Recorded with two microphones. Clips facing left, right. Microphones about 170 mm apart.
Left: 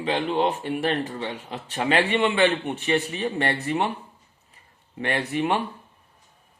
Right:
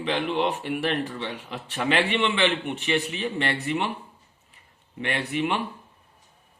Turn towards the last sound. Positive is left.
turn(degrees=50)  # may be behind; listen again after turning